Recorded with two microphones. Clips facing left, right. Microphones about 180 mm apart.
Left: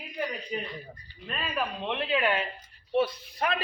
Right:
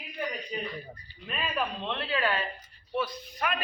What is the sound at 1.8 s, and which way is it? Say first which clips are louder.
A man's voice: left 2 dB; 15° left (ahead or behind).